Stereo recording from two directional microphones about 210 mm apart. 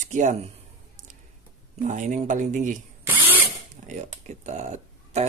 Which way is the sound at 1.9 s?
35° right (ahead or behind).